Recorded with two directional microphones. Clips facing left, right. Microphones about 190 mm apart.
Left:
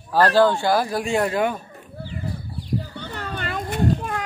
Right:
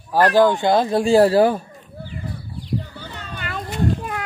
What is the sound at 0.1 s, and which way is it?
Speech, 15° right (ahead or behind).